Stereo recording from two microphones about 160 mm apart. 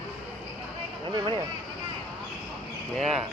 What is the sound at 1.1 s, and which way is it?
Speech, 25° right (ahead or behind).